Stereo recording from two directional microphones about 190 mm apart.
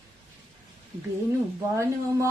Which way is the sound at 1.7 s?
15° right (ahead or behind).